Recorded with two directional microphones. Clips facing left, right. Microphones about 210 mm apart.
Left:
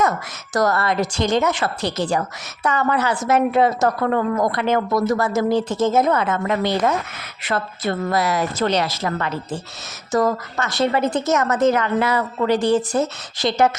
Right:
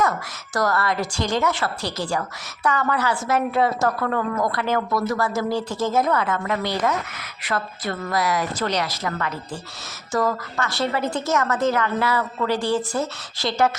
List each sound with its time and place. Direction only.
0.5 s a woman's voice: 20° left (ahead or behind)